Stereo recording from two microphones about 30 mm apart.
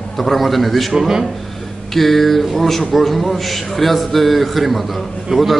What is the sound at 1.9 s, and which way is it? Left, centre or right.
A man's voice, centre.